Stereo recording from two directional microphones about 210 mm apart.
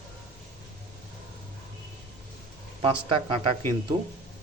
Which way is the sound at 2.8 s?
25° right (ahead or behind).